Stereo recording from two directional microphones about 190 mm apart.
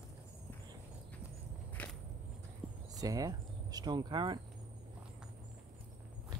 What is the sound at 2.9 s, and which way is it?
Speech, 20° right (ahead or behind).